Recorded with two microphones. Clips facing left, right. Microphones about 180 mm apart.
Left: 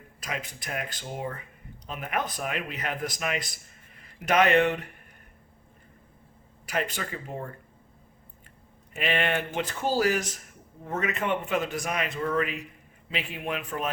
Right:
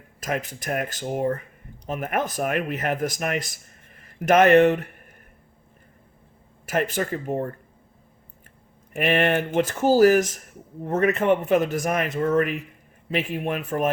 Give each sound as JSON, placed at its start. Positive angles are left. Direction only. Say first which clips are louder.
{"t": 0.2, "sound": "speech", "louder": "right 8 dB", "side_deg": -45}
{"t": 6.7, "sound": "speech", "louder": "right 7 dB", "side_deg": -45}
{"t": 8.9, "sound": "speech", "louder": "right 6 dB", "side_deg": -50}